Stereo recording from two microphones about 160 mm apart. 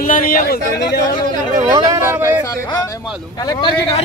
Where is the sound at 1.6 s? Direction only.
25° right (ahead or behind).